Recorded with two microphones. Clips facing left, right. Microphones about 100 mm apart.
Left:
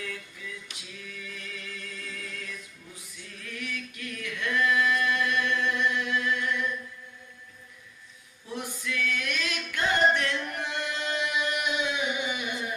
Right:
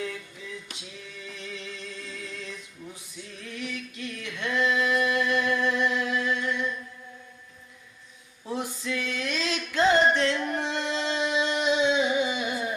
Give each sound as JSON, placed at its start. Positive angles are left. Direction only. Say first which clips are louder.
{"t": 0.0, "sound": "a sound", "louder": "right 4 dB", "side_deg": -25}
{"t": 3.3, "sound": "singing", "louder": "right 2 dB", "side_deg": -25}
{"t": 8.4, "sound": "singing", "louder": "right 4 dB", "side_deg": -25}